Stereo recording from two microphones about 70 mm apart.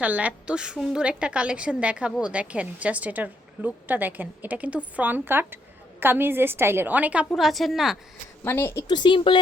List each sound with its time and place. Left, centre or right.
0.0 s a woman's voice: right
6.9 s a woman's voice: right
7.3 s a woman's voice: centre
8.4 s a woman's voice: left